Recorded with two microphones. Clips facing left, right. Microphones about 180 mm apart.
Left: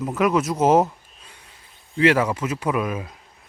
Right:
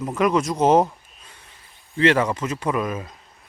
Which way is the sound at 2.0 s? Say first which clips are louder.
Even; 5° left (ahead or behind).